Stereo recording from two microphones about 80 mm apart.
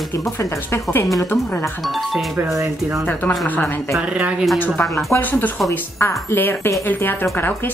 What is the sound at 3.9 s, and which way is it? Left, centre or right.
Speech, centre.